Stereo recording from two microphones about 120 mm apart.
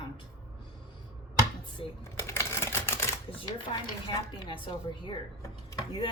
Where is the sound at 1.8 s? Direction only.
45° left (ahead or behind).